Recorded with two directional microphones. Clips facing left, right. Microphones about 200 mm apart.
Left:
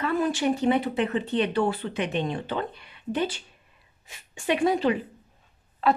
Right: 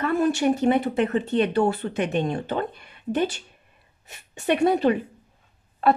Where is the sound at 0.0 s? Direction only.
45° right (ahead or behind).